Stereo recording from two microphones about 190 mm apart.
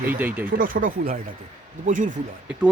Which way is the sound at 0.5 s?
45° right (ahead or behind).